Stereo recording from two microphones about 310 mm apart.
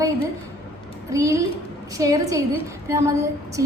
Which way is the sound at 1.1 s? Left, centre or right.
Centre.